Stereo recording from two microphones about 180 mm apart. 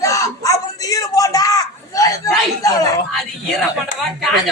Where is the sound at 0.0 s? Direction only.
20° left (ahead or behind).